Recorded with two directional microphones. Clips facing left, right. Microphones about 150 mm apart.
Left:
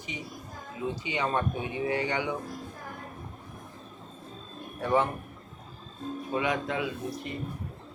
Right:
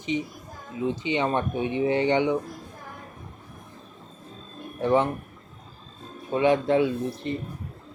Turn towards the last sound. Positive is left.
turn(degrees=-30)  # may be behind; listen again after turning